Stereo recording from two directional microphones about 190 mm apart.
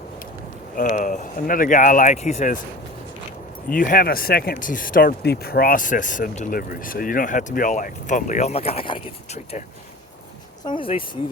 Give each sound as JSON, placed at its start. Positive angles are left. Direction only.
{"t": 0.8, "sound": "speech", "side_deg": 45}
{"t": 3.7, "sound": "speech", "side_deg": 50}
{"t": 10.7, "sound": "speech", "side_deg": 30}